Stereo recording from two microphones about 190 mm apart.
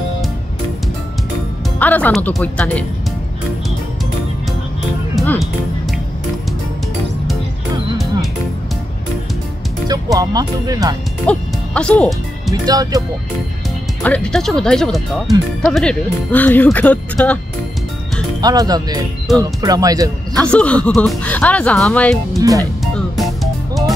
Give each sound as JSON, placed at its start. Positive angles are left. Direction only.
{"t": 1.8, "sound": "speech", "side_deg": 10}
{"t": 5.1, "sound": "music", "side_deg": 5}
{"t": 10.1, "sound": "speech", "side_deg": -20}
{"t": 11.2, "sound": "music", "side_deg": 5}
{"t": 12.6, "sound": "speech", "side_deg": -20}
{"t": 14.0, "sound": "speech", "side_deg": 5}
{"t": 18.4, "sound": "speech", "side_deg": -20}
{"t": 20.3, "sound": "speech", "side_deg": 5}
{"t": 23.1, "sound": "music", "side_deg": 0}